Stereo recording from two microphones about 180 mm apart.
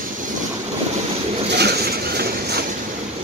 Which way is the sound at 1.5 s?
65° right (ahead or behind).